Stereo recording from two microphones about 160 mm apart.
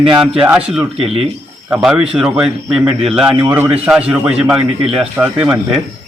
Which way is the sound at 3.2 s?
5° right (ahead or behind).